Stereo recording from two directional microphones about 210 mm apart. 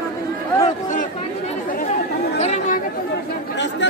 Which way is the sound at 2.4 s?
35° left (ahead or behind).